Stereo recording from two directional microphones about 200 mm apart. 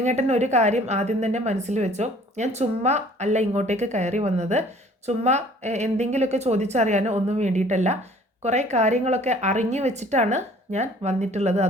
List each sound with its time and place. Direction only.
0.0 s a woman's voice: 35° right (ahead or behind)